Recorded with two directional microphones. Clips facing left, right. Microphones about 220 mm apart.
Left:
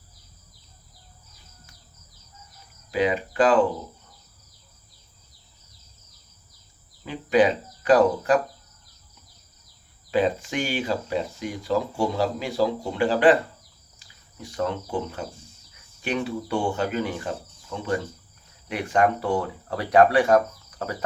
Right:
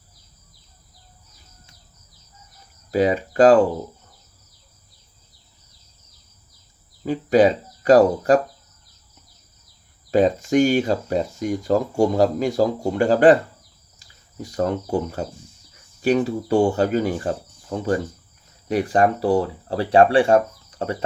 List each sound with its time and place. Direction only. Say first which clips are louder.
2.9 s speech: right 4 dB; 40° right (ahead or behind)
7.0 s speech: right 4 dB; 40° right (ahead or behind)
10.1 s speech: right 6 dB; 40° right (ahead or behind)
14.4 s speech: right 5 dB; 40° right (ahead or behind)